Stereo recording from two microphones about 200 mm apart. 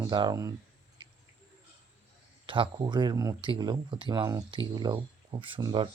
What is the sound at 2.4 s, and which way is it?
Speech, 25° right (ahead or behind).